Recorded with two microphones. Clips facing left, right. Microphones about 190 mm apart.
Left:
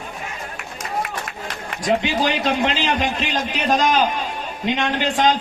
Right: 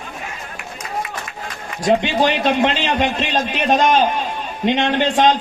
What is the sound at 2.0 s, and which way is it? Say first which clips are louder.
Speech: right 3 dB; 25° right (ahead or behind).